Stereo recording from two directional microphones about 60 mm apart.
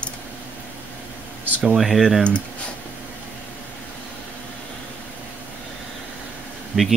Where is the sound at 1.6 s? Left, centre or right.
Centre.